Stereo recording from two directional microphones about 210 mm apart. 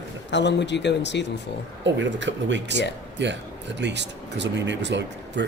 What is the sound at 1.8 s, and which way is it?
Speech, 60° right (ahead or behind).